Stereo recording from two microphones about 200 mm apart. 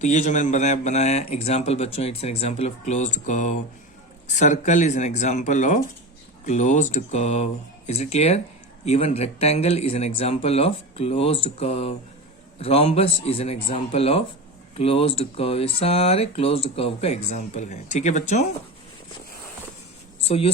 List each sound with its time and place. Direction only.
0.0 s speech: 35° left (ahead or behind)
20.2 s speech: 30° left (ahead or behind)